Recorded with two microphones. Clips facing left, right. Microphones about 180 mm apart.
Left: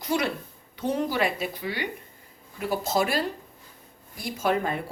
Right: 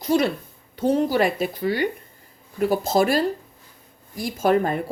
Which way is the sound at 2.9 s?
45° right (ahead or behind).